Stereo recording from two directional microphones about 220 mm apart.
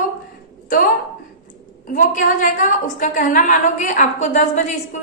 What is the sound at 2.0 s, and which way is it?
A woman's voice, 35° left (ahead or behind).